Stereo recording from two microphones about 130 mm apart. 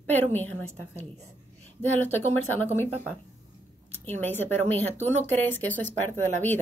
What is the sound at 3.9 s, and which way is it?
A woman's voice, 15° left (ahead or behind).